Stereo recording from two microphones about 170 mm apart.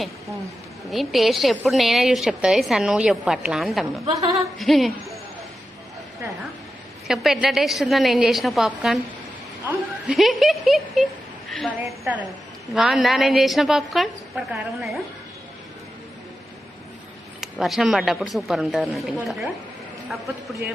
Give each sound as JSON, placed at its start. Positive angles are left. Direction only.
{"t": 0.9, "sound": "a woman's voice", "side_deg": 0}
{"t": 4.1, "sound": "a woman's voice", "side_deg": -20}
{"t": 4.5, "sound": "music", "side_deg": 0}
{"t": 7.1, "sound": "a woman's voice", "side_deg": 0}
{"t": 17.4, "sound": "a woman's voice", "side_deg": 0}